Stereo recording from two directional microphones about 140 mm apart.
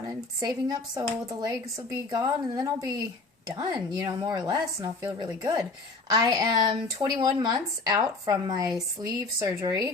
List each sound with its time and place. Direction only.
0.1 s speech: 25° right (ahead or behind)